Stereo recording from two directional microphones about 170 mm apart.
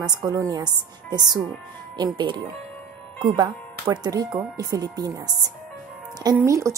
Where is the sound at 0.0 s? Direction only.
25° right (ahead or behind).